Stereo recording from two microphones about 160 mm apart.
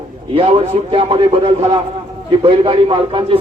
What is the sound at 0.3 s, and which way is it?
A man's voice, 35° right (ahead or behind).